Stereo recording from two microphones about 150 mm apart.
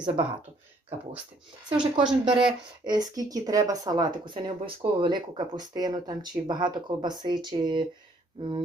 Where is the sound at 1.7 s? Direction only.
30° right (ahead or behind).